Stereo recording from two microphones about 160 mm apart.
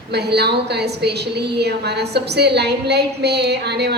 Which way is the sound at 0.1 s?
90° right.